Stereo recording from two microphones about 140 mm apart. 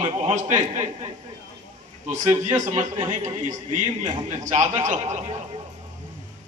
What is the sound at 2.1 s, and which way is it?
A man's voice, 60° right (ahead or behind).